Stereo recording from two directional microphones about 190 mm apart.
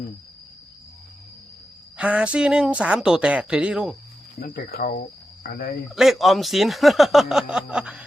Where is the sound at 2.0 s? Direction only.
5° right (ahead or behind).